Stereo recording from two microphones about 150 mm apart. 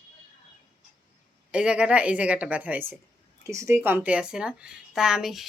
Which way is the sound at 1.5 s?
5° right (ahead or behind).